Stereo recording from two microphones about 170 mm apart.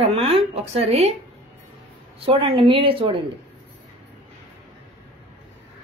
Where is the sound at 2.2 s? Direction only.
30° right (ahead or behind).